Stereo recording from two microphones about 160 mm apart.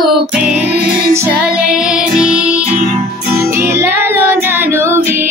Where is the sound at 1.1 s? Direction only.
15° right (ahead or behind).